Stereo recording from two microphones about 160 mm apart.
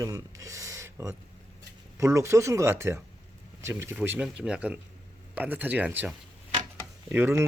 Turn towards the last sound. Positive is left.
turn(degrees=-15)  # may be behind; listen again after turning